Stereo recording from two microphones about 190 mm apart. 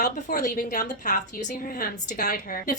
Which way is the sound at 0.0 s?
45° left (ahead or behind).